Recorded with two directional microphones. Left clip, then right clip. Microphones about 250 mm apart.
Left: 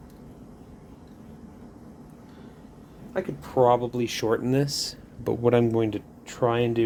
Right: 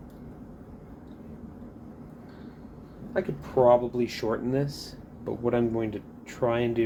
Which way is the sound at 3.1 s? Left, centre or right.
Left.